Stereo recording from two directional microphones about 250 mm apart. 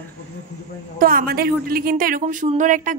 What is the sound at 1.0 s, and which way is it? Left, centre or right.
Speech, right.